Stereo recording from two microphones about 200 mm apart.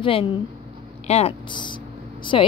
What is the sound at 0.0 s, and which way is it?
A woman's voice, 25° left (ahead or behind).